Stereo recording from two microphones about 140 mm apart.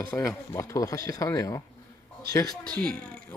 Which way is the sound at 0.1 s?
20° left (ahead or behind).